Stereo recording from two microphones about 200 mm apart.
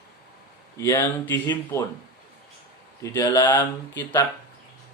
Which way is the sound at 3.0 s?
15° left (ahead or behind).